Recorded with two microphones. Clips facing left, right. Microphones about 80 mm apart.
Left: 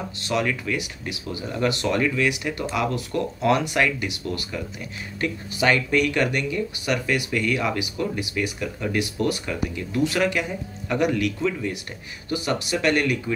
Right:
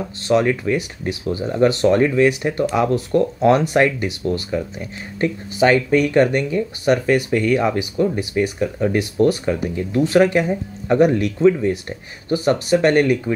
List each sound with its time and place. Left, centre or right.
0.3 s speech: right